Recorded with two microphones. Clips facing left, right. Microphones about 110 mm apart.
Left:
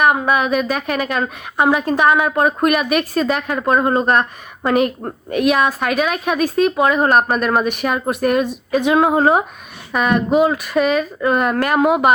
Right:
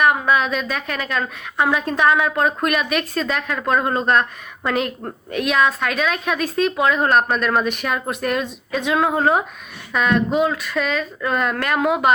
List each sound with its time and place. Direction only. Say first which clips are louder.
0.3 s a woman's voice: left 3 dB; 10° left (ahead or behind)
9.0 s speech: left 3 dB; 30° left (ahead or behind)
9.9 s a woman's voice: left 3 dB; 5° left (ahead or behind)
10.8 s a woman's voice: left 6 dB; 15° left (ahead or behind)